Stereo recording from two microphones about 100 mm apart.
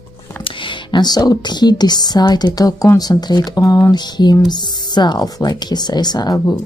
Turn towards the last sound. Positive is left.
turn(degrees=40)  # may be behind; listen again after turning